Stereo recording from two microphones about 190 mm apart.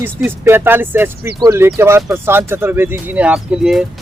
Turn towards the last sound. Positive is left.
turn(degrees=-5)  # may be behind; listen again after turning